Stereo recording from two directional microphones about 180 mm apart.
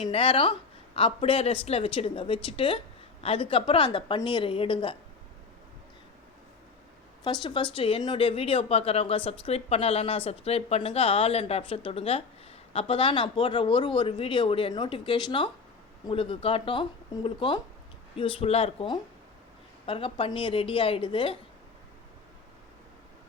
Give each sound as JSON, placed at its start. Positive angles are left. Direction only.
{"t": 0.0, "sound": "speech", "side_deg": 30}
{"t": 7.3, "sound": "speech", "side_deg": 25}